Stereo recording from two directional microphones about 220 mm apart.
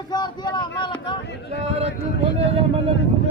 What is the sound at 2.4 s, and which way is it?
Speech, 25° right (ahead or behind).